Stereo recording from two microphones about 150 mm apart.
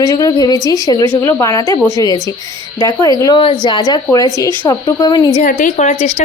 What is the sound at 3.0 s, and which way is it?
A woman's voice, 25° left (ahead or behind).